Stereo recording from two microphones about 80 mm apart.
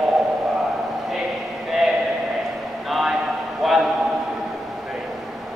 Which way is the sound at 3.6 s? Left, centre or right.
Centre.